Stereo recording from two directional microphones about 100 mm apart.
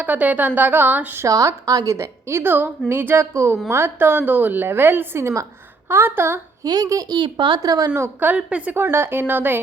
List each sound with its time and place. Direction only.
0.0 s a woman's voice: 15° right (ahead or behind)
1.3 s a woman's voice: 35° right (ahead or behind)
6.6 s a child's voice: 40° right (ahead or behind)
7.9 s a woman's voice: 20° right (ahead or behind)
8.7 s a woman's voice: 25° right (ahead or behind)